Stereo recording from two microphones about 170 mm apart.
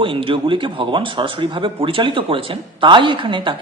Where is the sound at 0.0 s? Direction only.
30° right (ahead or behind).